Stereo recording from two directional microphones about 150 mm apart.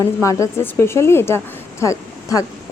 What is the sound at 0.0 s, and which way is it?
A woman's voice, 20° left (ahead or behind).